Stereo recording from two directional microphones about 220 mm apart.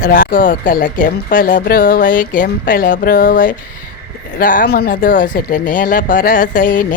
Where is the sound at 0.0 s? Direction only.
40° left (ahead or behind).